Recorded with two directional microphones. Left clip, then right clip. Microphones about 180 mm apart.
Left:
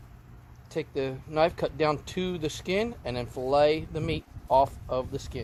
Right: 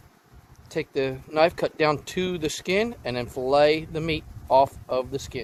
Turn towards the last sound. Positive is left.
turn(degrees=-40)  # may be behind; listen again after turning